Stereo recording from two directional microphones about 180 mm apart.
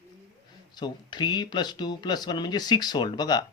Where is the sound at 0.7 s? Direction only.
25° left (ahead or behind).